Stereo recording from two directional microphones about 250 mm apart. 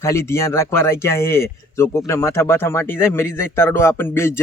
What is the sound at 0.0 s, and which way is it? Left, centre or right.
Speech, centre.